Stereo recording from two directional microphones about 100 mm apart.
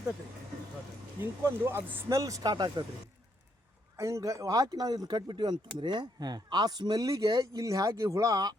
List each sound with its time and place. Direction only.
1.2 s speech: 25° right (ahead or behind); by 2.8 s 45° right (ahead or behind)
3.9 s speech: 30° right (ahead or behind)